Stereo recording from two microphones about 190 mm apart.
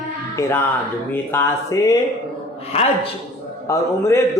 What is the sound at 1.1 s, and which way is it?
Speech, 10° left (ahead or behind).